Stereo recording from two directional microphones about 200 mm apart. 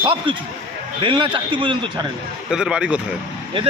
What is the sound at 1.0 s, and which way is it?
Speech, 25° right (ahead or behind).